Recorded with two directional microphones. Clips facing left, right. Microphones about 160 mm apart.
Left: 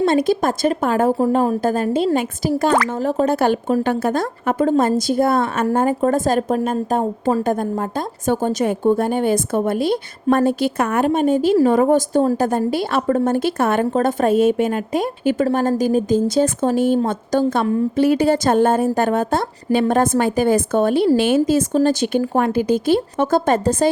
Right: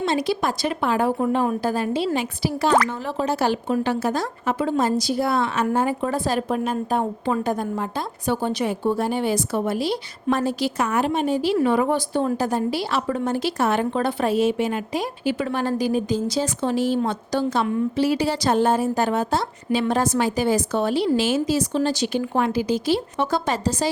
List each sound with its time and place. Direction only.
0.0 s a woman's voice: 50° left (ahead or behind)
12.5 s a woman's voice: 50° left (ahead or behind)
15.4 s a woman's voice: 40° left (ahead or behind)